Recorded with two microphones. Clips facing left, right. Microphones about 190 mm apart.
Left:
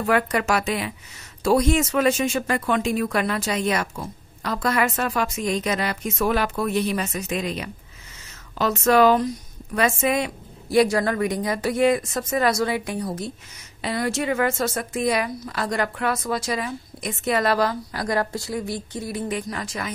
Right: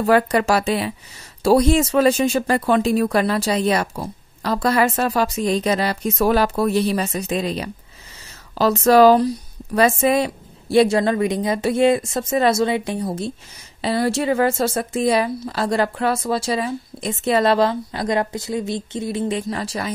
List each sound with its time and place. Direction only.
0.0 s speech: 35° right (ahead or behind)